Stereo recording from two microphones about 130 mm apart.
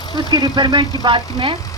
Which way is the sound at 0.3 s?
35° right (ahead or behind).